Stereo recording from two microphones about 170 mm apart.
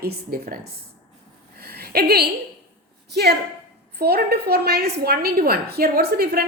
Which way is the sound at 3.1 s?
75° right (ahead or behind).